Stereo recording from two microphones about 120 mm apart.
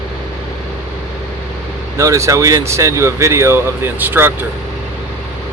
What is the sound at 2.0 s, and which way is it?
Speech, 25° right (ahead or behind).